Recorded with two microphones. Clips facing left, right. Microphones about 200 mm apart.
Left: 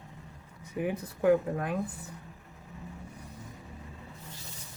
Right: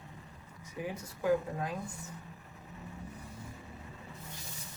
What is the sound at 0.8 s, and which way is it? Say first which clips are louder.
Speech: left 7 dB; 60° left (ahead or behind).